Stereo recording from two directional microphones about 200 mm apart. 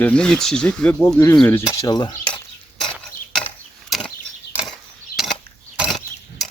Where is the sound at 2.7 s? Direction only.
Centre (ahead or behind).